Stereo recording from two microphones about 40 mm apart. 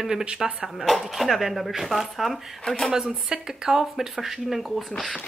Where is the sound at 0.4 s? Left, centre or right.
Centre.